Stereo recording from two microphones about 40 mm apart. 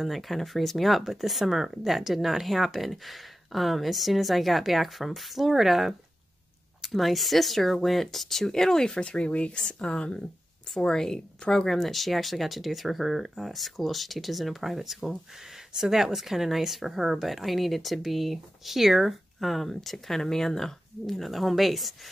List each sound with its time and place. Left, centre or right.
0.0 s a woman's voice: centre
11.6 s a woman's voice: centre